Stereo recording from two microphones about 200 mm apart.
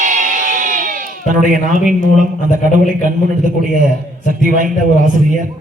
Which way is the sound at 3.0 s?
40° right (ahead or behind).